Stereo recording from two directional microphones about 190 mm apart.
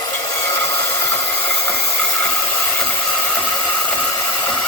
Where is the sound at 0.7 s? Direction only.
15° left (ahead or behind).